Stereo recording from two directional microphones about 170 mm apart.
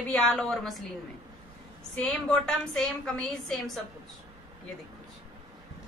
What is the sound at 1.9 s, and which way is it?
A woman's voice, 5° left (ahead or behind).